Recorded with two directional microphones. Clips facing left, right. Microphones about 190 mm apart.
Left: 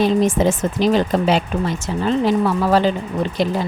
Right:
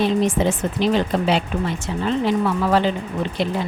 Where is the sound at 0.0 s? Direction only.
40° left (ahead or behind).